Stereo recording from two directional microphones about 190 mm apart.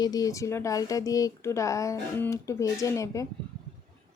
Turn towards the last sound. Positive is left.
turn(degrees=15)  # may be behind; listen again after turning